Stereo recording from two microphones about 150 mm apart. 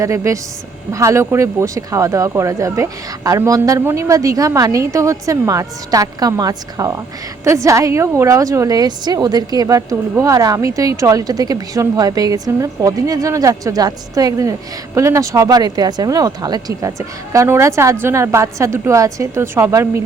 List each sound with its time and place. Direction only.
0.0 s a woman's voice: 20° right (ahead or behind)